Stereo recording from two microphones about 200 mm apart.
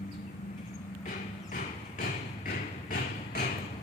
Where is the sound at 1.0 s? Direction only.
45° left (ahead or behind).